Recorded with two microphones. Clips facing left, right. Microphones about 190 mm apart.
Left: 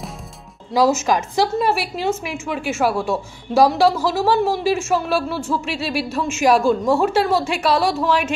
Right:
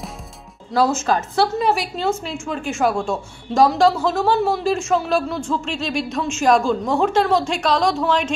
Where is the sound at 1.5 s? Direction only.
Centre (ahead or behind).